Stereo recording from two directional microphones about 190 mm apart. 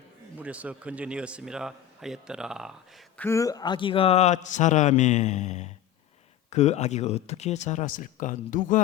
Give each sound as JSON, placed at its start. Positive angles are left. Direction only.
{"t": 0.3, "sound": "a man's voice", "side_deg": -5}
{"t": 3.2, "sound": "a man's voice", "side_deg": 15}